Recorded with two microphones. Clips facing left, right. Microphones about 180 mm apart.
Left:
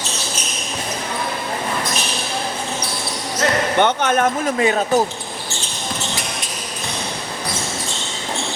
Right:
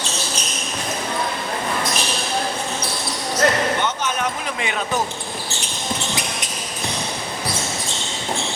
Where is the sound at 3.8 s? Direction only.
60° left (ahead or behind); by 5.0 s 40° left (ahead or behind).